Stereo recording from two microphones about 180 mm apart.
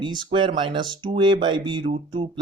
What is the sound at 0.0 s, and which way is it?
Speech, 25° right (ahead or behind).